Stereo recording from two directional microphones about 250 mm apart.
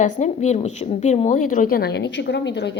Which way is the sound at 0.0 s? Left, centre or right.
Left.